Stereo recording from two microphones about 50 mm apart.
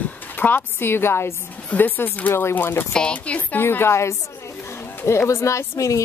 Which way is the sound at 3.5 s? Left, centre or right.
Left.